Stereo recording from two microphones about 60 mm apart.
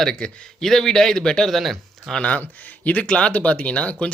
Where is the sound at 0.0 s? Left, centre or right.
Centre.